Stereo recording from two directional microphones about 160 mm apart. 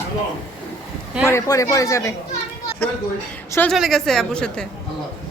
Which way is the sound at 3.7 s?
Centre (ahead or behind).